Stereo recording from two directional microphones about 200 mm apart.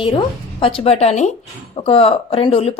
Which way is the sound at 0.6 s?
30° left (ahead or behind).